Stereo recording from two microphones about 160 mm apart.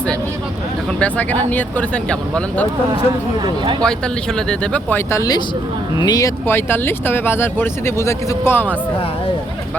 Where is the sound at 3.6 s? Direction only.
30° right (ahead or behind).